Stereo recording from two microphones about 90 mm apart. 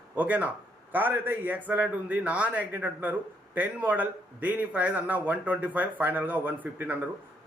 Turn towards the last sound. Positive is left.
turn(degrees=-20)  # may be behind; listen again after turning